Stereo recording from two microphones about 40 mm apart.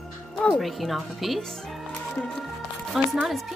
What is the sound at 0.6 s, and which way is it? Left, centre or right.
Speech, centre.